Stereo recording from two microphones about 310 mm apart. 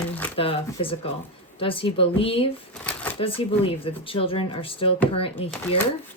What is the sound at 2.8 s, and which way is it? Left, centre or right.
Shuffling cards, centre.